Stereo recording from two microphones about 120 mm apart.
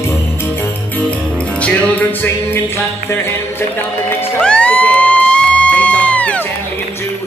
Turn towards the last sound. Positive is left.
turn(degrees=10)  # may be behind; listen again after turning